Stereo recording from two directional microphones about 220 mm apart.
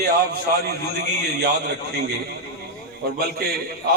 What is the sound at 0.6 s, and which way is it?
A man's voice, 45° right (ahead or behind).